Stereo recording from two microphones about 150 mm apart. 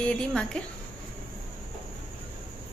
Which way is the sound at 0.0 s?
5° left (ahead or behind).